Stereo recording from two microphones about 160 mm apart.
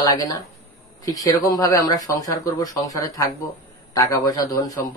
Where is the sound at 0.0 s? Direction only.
20° left (ahead or behind).